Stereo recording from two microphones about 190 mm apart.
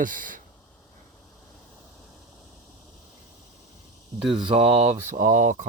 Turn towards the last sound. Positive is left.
turn(degrees=-40)  # may be behind; listen again after turning